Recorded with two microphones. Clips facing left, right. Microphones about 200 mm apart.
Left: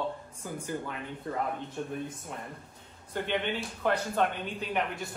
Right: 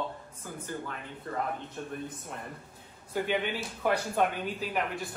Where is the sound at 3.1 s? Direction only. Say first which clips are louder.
Right 1 dB; 5° right (ahead or behind).